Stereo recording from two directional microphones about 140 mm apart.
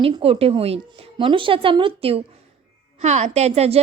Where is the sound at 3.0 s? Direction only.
55° right (ahead or behind).